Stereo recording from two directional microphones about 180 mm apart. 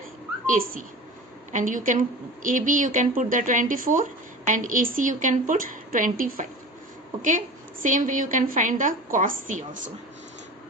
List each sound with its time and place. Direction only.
0.4 s a woman's voice: 50° right (ahead or behind)